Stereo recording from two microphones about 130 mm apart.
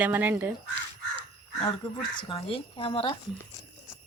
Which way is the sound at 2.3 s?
45° left (ahead or behind).